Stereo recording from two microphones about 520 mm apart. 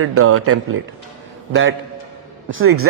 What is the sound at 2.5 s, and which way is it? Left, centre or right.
Speech, right.